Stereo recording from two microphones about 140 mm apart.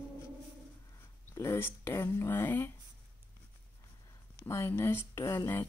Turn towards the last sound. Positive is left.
turn(degrees=20)  # may be behind; listen again after turning